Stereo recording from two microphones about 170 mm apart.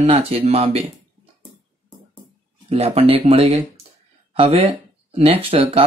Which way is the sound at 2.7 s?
35° right (ahead or behind).